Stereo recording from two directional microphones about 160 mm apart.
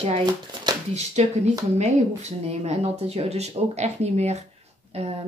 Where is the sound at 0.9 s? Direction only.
45° right (ahead or behind).